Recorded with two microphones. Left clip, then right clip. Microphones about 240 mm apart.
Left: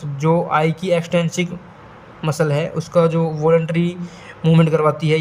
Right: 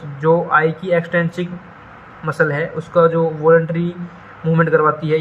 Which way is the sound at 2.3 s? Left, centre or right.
Left.